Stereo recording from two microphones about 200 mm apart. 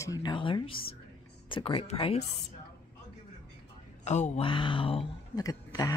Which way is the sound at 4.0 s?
35° left (ahead or behind).